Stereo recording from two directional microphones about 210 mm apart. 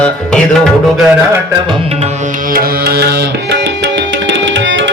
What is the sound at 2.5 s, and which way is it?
Tabla, 45° right (ahead or behind).